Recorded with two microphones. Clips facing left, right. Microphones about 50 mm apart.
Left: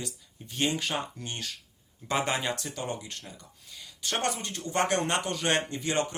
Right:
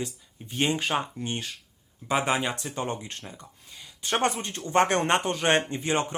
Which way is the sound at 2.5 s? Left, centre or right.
Right.